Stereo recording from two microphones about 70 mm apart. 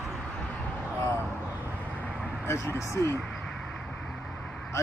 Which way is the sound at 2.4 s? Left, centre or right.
Left.